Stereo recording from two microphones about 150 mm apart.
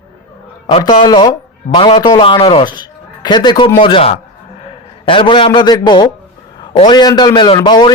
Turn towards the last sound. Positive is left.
turn(degrees=30)  # may be behind; listen again after turning